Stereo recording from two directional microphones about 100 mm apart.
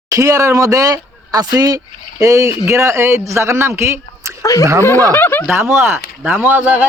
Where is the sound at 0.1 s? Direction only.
35° right (ahead or behind).